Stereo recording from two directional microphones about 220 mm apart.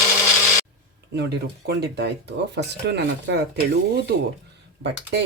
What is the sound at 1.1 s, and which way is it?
Speech, 50° right (ahead or behind).